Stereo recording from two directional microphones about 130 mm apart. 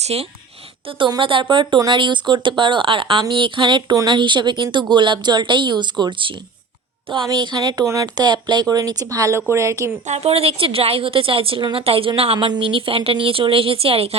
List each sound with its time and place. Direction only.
0.0 s a woman's voice: 50° right (ahead or behind)
0.9 s speech: 40° right (ahead or behind); by 9.9 s 20° right (ahead or behind)
10.1 s a woman's voice: 50° right (ahead or behind)